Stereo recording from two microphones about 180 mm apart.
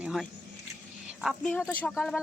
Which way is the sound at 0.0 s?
5° right (ahead or behind).